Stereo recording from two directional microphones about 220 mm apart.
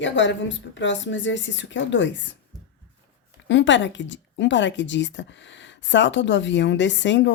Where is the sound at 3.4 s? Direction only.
55° left (ahead or behind).